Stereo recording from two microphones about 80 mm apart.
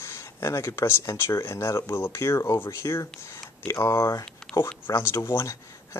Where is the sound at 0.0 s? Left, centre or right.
Left.